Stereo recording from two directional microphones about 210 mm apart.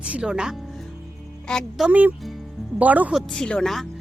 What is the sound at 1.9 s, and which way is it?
Speech, 5° right (ahead or behind).